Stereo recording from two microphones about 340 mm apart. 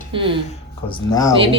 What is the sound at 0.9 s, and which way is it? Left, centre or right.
Speech, centre.